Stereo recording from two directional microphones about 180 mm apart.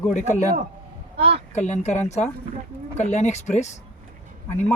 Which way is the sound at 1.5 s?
40° left (ahead or behind).